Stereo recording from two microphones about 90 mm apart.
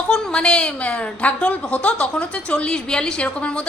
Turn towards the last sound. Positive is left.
turn(degrees=10)  # may be behind; listen again after turning